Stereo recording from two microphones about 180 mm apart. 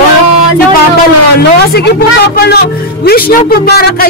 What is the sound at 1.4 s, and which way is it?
A man's voice, 65° left (ahead or behind).